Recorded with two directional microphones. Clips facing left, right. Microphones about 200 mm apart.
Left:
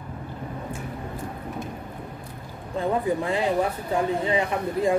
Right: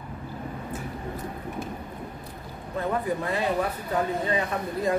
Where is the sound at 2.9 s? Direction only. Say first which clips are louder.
Left 3 dB; 20° left (ahead or behind).